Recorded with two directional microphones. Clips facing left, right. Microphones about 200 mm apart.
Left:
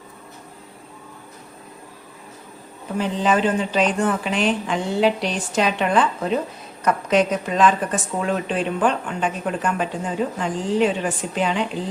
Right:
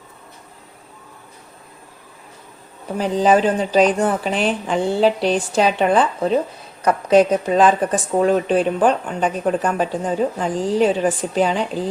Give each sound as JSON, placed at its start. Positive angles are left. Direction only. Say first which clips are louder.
{"t": 3.0, "sound": "a woman's voice", "louder": "right 4 dB", "side_deg": -40}